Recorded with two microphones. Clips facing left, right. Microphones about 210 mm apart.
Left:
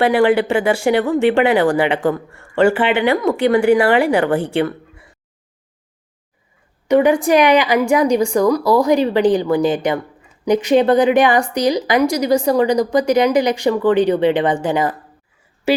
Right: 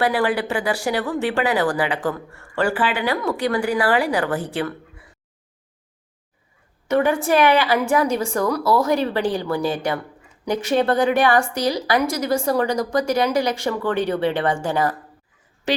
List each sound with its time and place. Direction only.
0.0 s speech: 25° left (ahead or behind)
6.8 s a woman's voice: 15° left (ahead or behind)